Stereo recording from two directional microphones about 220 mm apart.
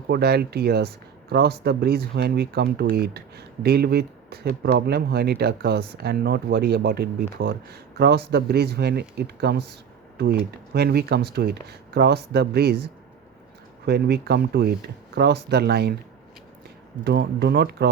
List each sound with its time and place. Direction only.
0.1 s speech: 45° right (ahead or behind)
13.8 s speech: 50° right (ahead or behind)
17.0 s speech: 50° right (ahead or behind)